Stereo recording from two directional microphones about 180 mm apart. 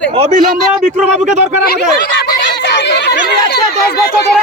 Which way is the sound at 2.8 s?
65° left (ahead or behind).